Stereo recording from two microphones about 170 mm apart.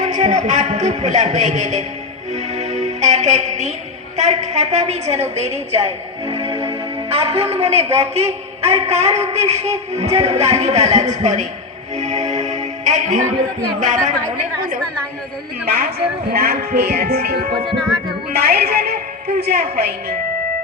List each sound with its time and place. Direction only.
0.0 s a man's voice: 45° right (ahead or behind)
2.3 s music: 45° right (ahead or behind)
4.2 s a man's voice: 40° right (ahead or behind)
11.9 s music: 45° right (ahead or behind)
13.7 s a man's voice: 45° right (ahead or behind)
15.6 s speech: 65° right (ahead or behind)
17.7 s music: centre (ahead or behind)
18.3 s speech: 65° right (ahead or behind)